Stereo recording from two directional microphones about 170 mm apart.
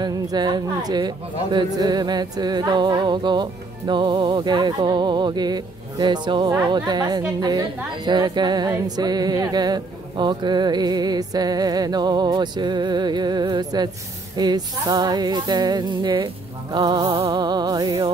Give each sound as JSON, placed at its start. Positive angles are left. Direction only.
{"t": 0.0, "sound": "a woman's voice", "side_deg": -25}